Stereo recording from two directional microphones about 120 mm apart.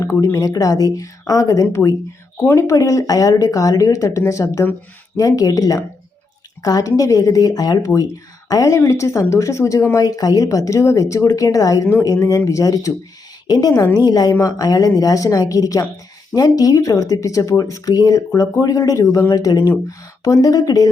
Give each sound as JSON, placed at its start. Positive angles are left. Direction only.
{"t": 0.0, "sound": "a woman's voice", "side_deg": 25}